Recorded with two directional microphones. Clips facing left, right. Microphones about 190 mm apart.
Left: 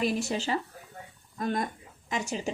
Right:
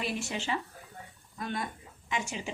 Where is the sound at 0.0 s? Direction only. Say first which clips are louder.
Left 6 dB; 40° left (ahead or behind).